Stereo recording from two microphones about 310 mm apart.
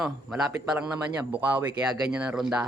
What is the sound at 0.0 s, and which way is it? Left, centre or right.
Speech, centre.